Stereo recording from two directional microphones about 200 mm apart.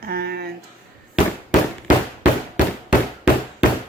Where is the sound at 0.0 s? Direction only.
50° right (ahead or behind).